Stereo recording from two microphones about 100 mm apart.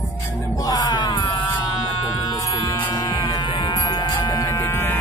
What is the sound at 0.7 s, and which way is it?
Music, 45° left (ahead or behind).